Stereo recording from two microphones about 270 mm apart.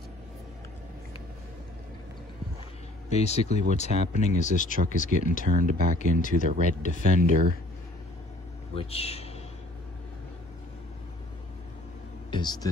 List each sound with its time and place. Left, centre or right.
3.1 s speech: left
5.5 s speech: right
5.9 s speech: left
7.0 s speech: right
8.7 s speech: left
12.3 s speech: centre